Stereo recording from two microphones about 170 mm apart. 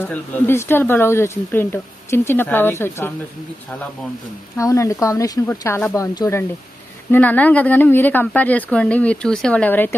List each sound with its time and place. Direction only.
0.0 s speech: 10° left (ahead or behind)
4.6 s speech: 20° left (ahead or behind)